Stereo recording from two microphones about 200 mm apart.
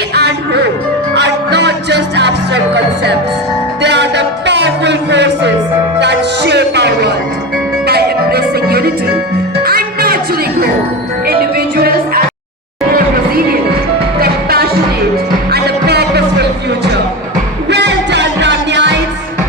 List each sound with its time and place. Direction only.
0.1 s music: 55° right (ahead or behind)
3.8 s a sound: 60° right (ahead or behind)
6.0 s music: 60° right (ahead or behind)
11.3 s music: 50° right (ahead or behind)